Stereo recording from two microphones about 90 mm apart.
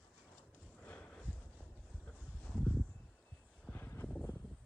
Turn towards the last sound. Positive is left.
turn(degrees=25)  # may be behind; listen again after turning